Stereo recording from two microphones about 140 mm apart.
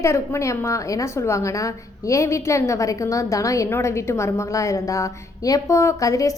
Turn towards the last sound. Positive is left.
turn(degrees=25)  # may be behind; listen again after turning